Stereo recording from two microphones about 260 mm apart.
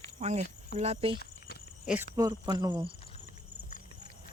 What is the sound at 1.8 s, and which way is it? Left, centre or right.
Speech, centre.